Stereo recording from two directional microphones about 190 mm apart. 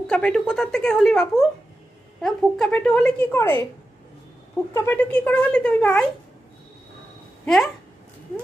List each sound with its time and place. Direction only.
0.1 s speech: 5° left (ahead or behind)
4.7 s speech: 10° left (ahead or behind)
7.4 s speech: centre (ahead or behind)